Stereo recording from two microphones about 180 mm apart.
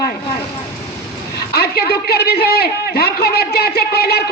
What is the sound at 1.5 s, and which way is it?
A man's voice, 60° left (ahead or behind).